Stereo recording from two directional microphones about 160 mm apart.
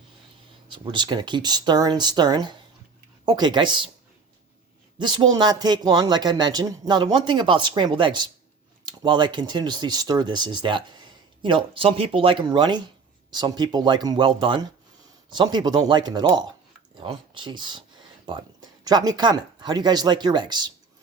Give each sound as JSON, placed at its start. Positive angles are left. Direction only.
{"t": 0.7, "sound": "speech", "side_deg": -30}
{"t": 4.9, "sound": "speech", "side_deg": -30}